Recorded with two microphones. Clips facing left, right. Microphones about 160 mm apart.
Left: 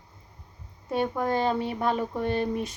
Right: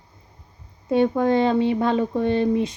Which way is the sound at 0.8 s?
25° right (ahead or behind).